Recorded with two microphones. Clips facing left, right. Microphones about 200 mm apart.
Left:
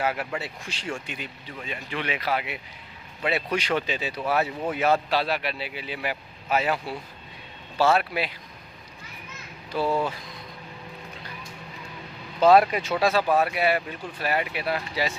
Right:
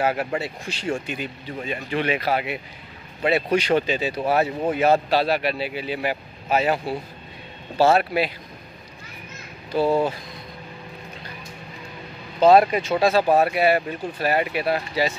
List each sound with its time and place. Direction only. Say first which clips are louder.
0.0 s speech: right 5 dB; 40° right (ahead or behind)
9.7 s speech: right 5 dB; 25° right (ahead or behind)
12.4 s speech: right 3 dB; 25° right (ahead or behind)